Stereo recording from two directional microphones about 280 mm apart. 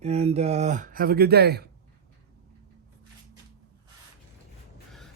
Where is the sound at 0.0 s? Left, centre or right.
Right.